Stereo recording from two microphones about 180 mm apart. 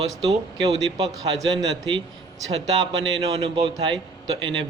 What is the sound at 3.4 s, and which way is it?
Speech, 30° right (ahead or behind).